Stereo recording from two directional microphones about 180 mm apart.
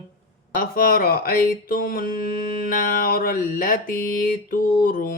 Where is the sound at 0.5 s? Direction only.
50° left (ahead or behind).